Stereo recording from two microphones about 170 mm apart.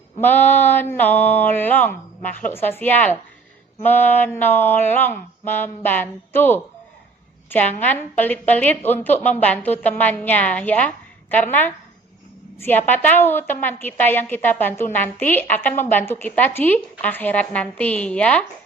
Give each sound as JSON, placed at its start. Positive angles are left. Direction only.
{"t": 0.2, "sound": "a woman's voice", "side_deg": 10}
{"t": 7.9, "sound": "a woman's voice", "side_deg": 10}